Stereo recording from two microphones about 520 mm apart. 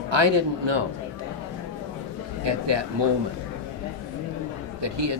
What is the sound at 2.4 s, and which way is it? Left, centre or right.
Speech, right.